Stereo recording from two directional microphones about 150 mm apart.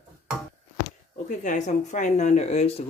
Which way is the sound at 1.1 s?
55° left (ahead or behind).